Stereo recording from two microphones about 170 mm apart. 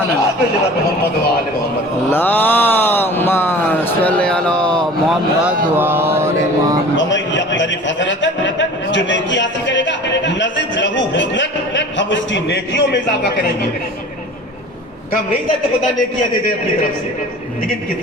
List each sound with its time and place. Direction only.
2.0 s a sound: 10° left (ahead or behind)
5.7 s mantra: 10° right (ahead or behind)
6.9 s a man's voice: 90° left